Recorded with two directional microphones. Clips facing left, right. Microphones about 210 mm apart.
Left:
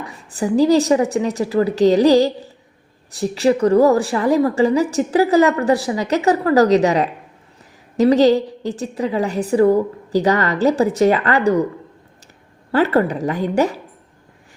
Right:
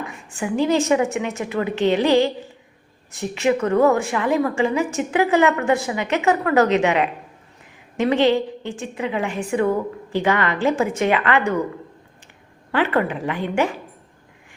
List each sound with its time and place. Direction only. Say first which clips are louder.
0.0 s a woman's voice: left 4 dB; 35° left (ahead or behind)
12.7 s a woman's voice: left 4 dB; 40° left (ahead or behind)